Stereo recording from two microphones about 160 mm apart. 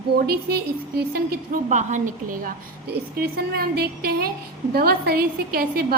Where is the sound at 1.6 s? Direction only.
50° right (ahead or behind).